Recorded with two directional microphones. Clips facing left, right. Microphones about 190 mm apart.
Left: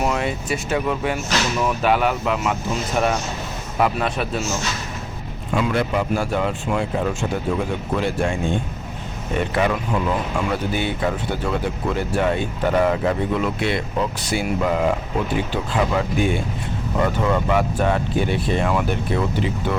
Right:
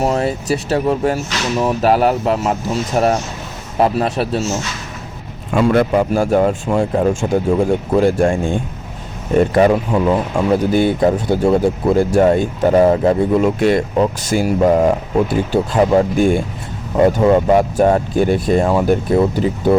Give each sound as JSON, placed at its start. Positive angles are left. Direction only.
{"t": 0.0, "sound": "speech", "side_deg": -35}
{"t": 5.5, "sound": "speech", "side_deg": -50}
{"t": 9.4, "sound": "speech", "side_deg": -40}